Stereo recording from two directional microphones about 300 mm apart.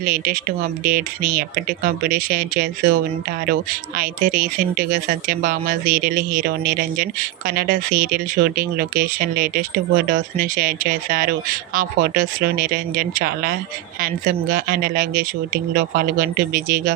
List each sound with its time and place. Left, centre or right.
0.0 s speech: right